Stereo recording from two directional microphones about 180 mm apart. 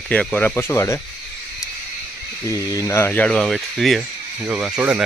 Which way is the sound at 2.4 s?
15° left (ahead or behind).